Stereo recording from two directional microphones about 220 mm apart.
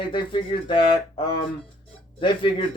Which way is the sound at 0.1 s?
25° left (ahead or behind).